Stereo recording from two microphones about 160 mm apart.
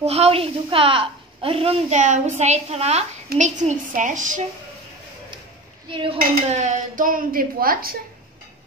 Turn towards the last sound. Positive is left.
turn(degrees=-65)  # may be behind; listen again after turning